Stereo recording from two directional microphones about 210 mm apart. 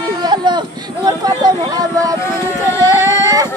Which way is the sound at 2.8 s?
15° right (ahead or behind).